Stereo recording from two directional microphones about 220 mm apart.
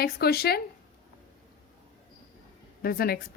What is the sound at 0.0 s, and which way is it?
Speech, 45° left (ahead or behind).